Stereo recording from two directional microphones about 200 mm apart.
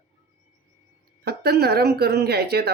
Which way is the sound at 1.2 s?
55° right (ahead or behind).